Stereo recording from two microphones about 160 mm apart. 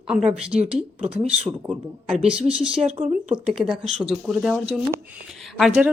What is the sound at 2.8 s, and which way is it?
Speech, 35° right (ahead or behind).